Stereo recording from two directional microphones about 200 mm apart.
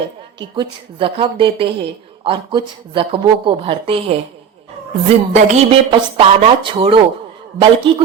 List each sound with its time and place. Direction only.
0.3 s a woman's voice: 25° right (ahead or behind)